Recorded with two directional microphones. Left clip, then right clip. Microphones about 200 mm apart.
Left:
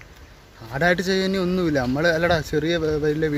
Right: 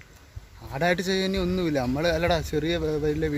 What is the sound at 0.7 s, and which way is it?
A man's voice, 5° left (ahead or behind).